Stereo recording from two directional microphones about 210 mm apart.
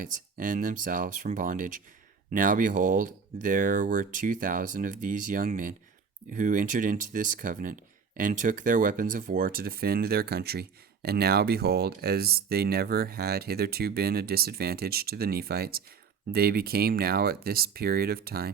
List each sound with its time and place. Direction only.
0.0 s speech: 40° right (ahead or behind)